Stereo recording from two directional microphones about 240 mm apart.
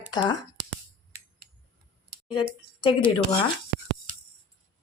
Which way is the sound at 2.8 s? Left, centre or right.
Left.